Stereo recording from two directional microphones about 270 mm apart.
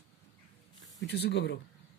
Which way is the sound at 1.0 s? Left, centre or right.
Left.